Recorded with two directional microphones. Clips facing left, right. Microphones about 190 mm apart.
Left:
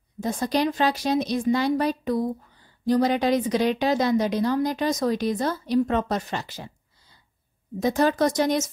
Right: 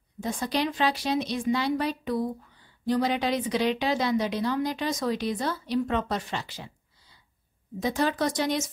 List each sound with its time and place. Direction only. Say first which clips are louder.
0.2 s a woman's voice: left 4 dB; 40° left (ahead or behind)